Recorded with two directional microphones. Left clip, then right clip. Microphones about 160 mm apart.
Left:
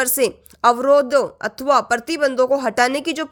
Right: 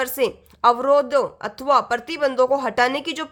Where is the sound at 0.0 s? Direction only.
30° left (ahead or behind).